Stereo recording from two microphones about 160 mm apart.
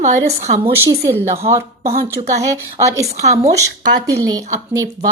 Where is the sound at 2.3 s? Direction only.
20° right (ahead or behind).